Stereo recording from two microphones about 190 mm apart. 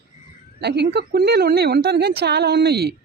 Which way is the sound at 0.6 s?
60° right (ahead or behind).